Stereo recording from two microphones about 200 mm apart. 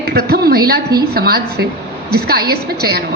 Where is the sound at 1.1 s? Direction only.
50° right (ahead or behind).